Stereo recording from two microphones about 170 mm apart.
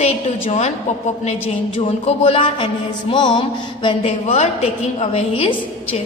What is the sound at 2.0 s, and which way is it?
A woman's voice, 35° left (ahead or behind).